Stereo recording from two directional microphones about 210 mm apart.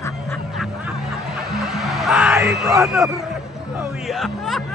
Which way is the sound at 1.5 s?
Centre (ahead or behind).